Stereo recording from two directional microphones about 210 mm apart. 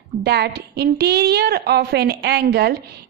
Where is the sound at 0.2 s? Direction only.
50° right (ahead or behind).